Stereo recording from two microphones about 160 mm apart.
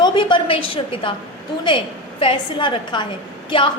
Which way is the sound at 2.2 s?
30° left (ahead or behind).